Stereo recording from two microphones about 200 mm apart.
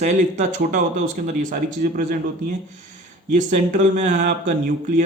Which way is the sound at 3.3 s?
40° right (ahead or behind).